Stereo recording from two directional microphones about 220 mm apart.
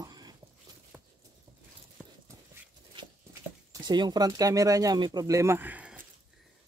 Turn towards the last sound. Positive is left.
turn(degrees=-5)  # may be behind; listen again after turning